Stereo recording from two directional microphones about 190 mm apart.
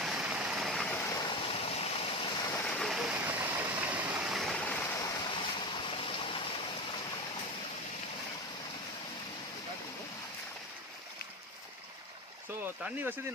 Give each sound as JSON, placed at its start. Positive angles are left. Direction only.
{"t": 0.0, "sound": "vehicle", "side_deg": -5}
{"t": 2.6, "sound": "rain", "side_deg": 5}
{"t": 3.9, "sound": "stream", "side_deg": -5}
{"t": 12.6, "sound": "speech", "side_deg": -10}